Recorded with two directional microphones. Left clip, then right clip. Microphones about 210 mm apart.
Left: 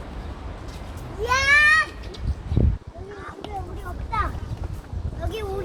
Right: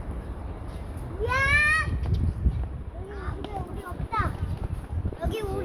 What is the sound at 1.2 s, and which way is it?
Speech, 40° left (ahead or behind).